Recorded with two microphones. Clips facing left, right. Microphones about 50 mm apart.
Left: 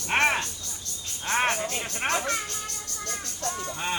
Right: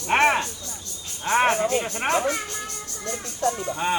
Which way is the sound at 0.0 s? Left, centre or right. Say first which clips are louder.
Right 4 dB; centre.